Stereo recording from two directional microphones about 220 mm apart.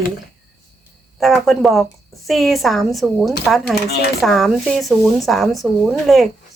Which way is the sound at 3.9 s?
45° left (ahead or behind).